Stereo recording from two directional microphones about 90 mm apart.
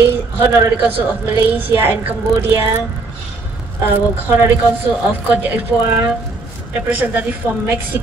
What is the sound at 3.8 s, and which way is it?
Speech, 25° right (ahead or behind).